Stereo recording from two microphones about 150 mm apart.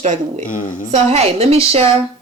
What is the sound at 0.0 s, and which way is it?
A woman's voice, 55° right (ahead or behind).